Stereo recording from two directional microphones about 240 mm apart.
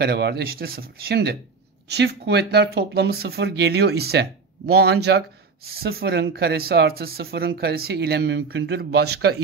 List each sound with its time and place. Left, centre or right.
0.0 s speech: right